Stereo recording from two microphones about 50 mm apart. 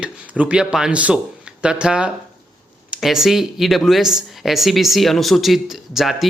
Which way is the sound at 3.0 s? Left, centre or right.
Centre.